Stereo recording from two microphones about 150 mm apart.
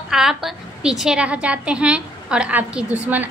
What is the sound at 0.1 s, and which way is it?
A woman's voice, 5° right (ahead or behind).